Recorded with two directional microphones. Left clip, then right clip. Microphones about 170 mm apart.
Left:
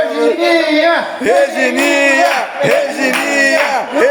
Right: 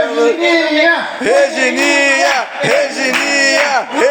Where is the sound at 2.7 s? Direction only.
5° right (ahead or behind).